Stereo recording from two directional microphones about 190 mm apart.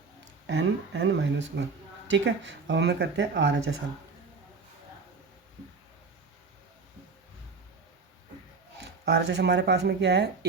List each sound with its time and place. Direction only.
0.4 s speech: 75° right (ahead or behind)
8.8 s speech: 65° right (ahead or behind)